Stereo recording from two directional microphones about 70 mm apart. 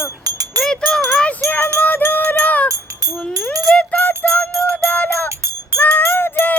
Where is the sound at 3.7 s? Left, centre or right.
Left.